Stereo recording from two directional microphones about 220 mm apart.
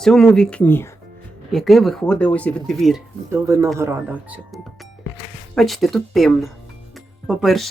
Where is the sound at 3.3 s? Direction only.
15° right (ahead or behind).